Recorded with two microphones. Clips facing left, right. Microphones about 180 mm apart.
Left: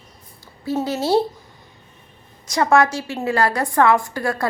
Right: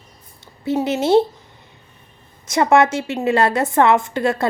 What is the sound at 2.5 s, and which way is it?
A woman's voice, 20° right (ahead or behind).